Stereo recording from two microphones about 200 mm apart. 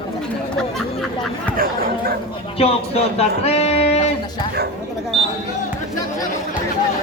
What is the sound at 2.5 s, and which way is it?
Speech, 30° left (ahead or behind).